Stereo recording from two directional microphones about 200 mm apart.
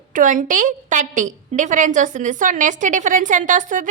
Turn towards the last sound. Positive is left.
turn(degrees=-40)  # may be behind; listen again after turning